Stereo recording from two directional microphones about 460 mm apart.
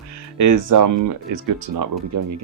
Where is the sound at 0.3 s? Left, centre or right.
Right.